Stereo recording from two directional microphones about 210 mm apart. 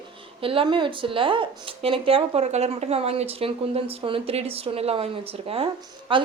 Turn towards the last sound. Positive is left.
turn(degrees=-25)  # may be behind; listen again after turning